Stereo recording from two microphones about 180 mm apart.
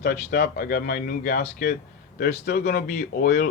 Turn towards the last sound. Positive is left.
turn(degrees=50)  # may be behind; listen again after turning